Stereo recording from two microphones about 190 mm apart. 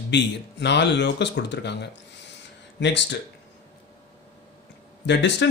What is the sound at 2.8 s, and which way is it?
Speech, 70° left (ahead or behind).